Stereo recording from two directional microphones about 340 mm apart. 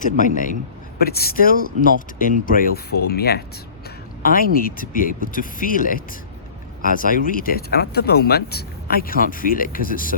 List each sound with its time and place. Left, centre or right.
0.0 s speech: left